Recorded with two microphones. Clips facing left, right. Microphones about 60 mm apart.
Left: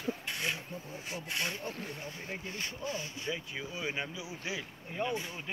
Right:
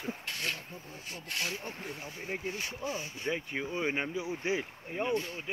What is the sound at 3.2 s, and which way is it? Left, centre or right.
Speech, right.